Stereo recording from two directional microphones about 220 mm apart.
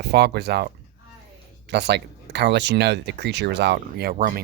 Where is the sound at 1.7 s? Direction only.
50° right (ahead or behind).